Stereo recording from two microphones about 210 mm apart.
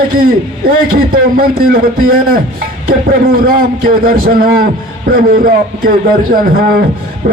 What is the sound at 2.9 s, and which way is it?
A man's voice, 45° right (ahead or behind).